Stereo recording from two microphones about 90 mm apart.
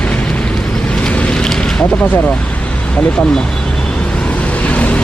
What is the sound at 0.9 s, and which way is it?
Vehicle, 10° left (ahead or behind).